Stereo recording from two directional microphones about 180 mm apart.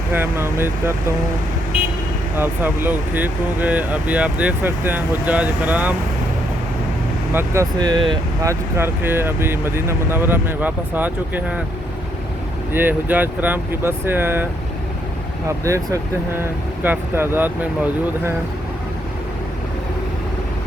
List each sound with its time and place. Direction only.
0.1 s speech: 10° right (ahead or behind)
2.3 s speech: 10° right (ahead or behind)
7.3 s speech: 15° right (ahead or behind)
12.7 s speech: 10° right (ahead or behind)
15.4 s speech: 15° right (ahead or behind)